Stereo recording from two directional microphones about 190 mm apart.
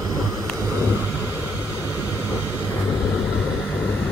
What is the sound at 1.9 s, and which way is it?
Vehicle, 15° left (ahead or behind).